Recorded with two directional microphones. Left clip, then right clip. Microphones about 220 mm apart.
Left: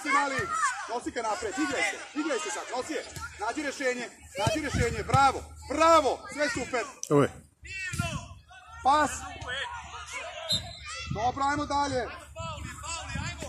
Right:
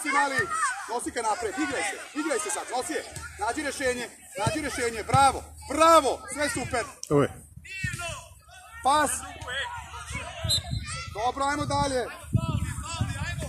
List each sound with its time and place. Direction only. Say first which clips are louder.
0.0 s a child's voice: right 2 dB; 45° right (ahead or behind)
7.0 s cat: left 1 dB; 10° left (ahead or behind)
8.8 s speech: right 1 dB; 50° right (ahead or behind)
9.2 s speech: right 2 dB; 5° right (ahead or behind)
10.9 s children playing: left 1 dB; 25° right (ahead or behind)
11.2 s speech: right 1 dB; 50° right (ahead or behind)
12.1 s a sound: right 3 dB; 5° left (ahead or behind)